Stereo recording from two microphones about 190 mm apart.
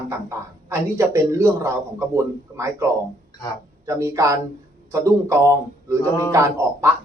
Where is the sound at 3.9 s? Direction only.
15° right (ahead or behind).